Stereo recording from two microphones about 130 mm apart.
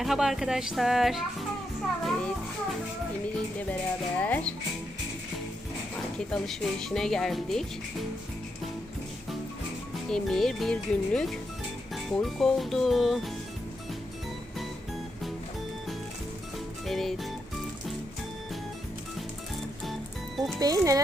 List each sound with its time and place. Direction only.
0.0 s a child's voice: centre (ahead or behind)
4.2 s music: 10° left (ahead or behind)
6.1 s speech: 5° left (ahead or behind)
10.1 s speech: 5° left (ahead or behind)
16.8 s music: centre (ahead or behind)
19.8 s music: centre (ahead or behind)
20.6 s speech: 25° right (ahead or behind)